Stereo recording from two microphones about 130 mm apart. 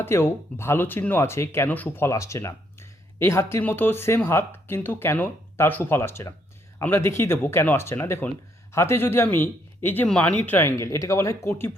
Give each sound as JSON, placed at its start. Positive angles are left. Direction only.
{"t": 0.0, "sound": "speech", "side_deg": 20}